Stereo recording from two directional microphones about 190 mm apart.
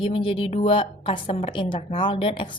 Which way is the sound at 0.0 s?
30° left (ahead or behind).